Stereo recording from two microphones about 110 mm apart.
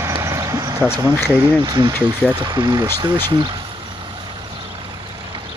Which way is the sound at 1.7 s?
45° right (ahead or behind).